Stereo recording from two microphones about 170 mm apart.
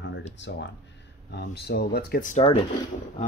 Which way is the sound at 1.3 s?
80° left.